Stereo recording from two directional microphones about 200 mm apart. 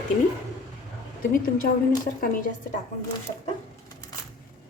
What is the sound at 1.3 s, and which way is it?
A woman's voice, 45° left (ahead or behind).